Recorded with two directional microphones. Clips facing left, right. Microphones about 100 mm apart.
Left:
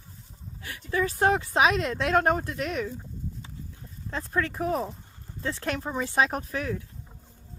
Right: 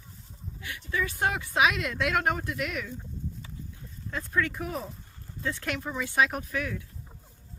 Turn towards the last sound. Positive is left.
turn(degrees=35)  # may be behind; listen again after turning